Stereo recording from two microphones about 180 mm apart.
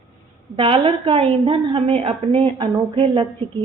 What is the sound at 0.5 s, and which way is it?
A woman's voice, 30° right (ahead or behind).